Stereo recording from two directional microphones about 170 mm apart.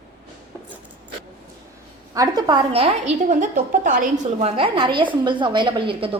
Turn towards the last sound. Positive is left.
turn(degrees=-30)  # may be behind; listen again after turning